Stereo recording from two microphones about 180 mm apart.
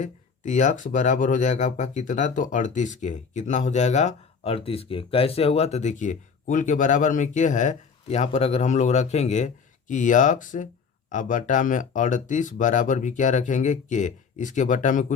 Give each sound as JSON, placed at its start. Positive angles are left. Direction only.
{"t": 0.0, "sound": "speech", "side_deg": 45}